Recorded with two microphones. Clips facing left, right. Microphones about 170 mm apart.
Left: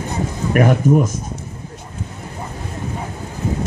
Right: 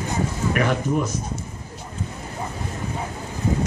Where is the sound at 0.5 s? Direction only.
50° left (ahead or behind).